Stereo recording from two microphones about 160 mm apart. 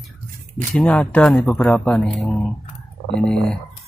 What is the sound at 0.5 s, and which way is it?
Speech, 5° left (ahead or behind).